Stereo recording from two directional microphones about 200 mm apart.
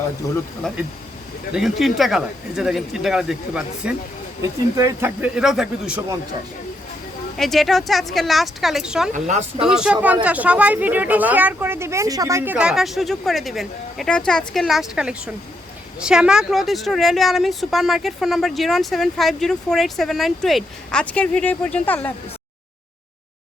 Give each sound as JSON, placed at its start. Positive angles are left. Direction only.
{"t": 0.7, "sound": "a woman's voice", "side_deg": 5}
{"t": 7.3, "sound": "a woman's voice", "side_deg": 0}
{"t": 9.1, "sound": "speech", "side_deg": -35}
{"t": 9.6, "sound": "a woman's voice", "side_deg": -5}